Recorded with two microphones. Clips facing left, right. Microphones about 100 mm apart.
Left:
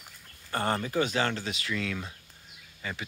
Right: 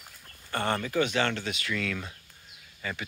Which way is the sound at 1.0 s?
30° left (ahead or behind).